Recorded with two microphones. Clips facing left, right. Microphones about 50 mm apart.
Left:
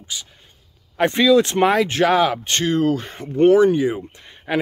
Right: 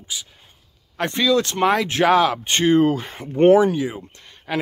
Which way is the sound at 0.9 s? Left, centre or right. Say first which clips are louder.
Left 4 dB; centre.